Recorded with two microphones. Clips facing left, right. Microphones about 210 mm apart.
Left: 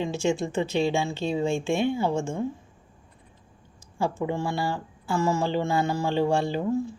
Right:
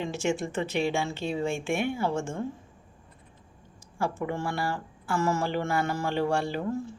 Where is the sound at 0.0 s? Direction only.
15° left (ahead or behind).